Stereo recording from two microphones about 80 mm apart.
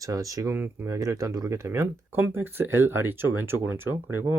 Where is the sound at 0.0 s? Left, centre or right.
Right.